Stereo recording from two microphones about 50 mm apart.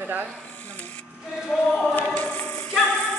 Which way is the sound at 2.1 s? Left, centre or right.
Left.